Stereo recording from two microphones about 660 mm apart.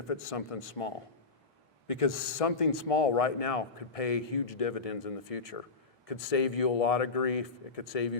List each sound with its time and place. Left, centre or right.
0.1 s a man's voice: left